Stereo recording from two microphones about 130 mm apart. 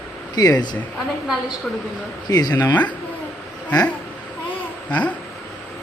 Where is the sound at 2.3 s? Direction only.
30° left (ahead or behind).